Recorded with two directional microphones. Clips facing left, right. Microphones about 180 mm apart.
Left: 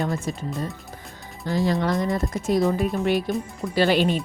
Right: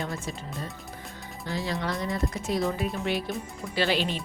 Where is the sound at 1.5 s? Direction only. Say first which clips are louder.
Left 8 dB; 45° left (ahead or behind).